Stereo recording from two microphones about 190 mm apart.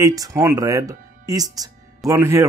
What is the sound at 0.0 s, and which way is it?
Speech, 15° right (ahead or behind).